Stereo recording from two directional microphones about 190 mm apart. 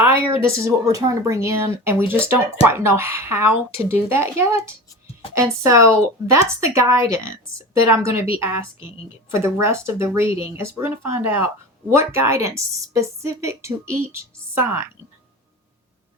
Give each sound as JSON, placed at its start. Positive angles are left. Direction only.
{"t": 0.4, "sound": "a woman's voice", "side_deg": -15}